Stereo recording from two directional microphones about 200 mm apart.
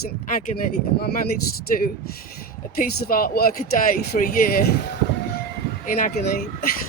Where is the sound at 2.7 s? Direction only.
45° left (ahead or behind).